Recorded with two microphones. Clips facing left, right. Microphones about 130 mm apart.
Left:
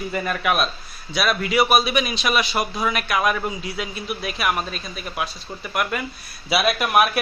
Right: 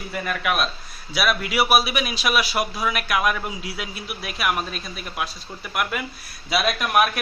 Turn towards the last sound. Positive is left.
turn(degrees=5)  # may be behind; listen again after turning